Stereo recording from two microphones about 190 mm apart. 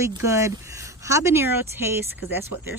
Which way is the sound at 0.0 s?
15° right (ahead or behind).